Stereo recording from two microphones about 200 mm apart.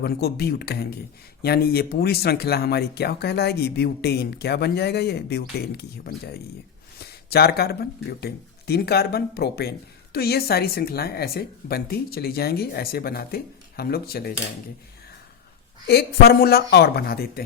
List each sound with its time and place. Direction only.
0.0 s speech: 50° left (ahead or behind)
15.9 s speech: 50° left (ahead or behind)